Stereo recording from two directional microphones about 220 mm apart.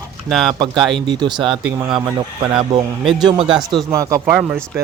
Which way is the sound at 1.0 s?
20° right (ahead or behind).